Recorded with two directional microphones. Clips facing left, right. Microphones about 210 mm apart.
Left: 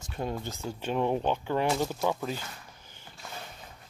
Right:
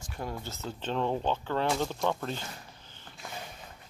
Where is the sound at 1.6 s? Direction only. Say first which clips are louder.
Even; centre (ahead or behind).